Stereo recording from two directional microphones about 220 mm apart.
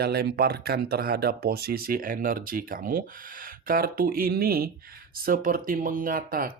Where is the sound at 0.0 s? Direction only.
45° right (ahead or behind).